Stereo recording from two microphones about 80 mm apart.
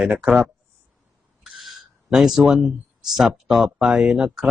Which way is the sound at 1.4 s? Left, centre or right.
Centre.